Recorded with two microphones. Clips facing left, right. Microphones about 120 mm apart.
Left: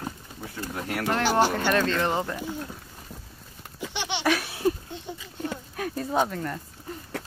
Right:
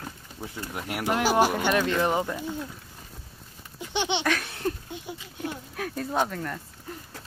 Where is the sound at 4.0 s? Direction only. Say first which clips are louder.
Right 5 dB; 20° right (ahead or behind).